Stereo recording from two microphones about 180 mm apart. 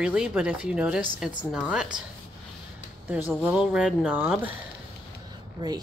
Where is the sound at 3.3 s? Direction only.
Centre (ahead or behind).